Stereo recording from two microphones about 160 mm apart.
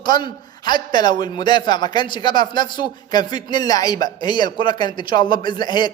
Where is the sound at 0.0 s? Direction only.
30° left (ahead or behind).